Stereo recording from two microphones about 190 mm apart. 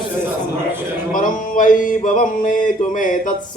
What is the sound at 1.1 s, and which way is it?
Speech, 45° left (ahead or behind).